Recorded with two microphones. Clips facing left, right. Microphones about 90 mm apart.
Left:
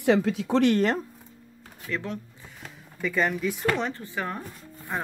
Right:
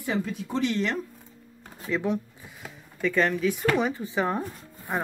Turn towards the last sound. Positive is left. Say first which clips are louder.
# right 2 dB
turn(degrees=-20)  # may be behind; listen again after turning